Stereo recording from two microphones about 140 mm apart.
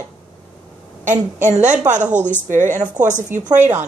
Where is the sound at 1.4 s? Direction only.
60° right (ahead or behind).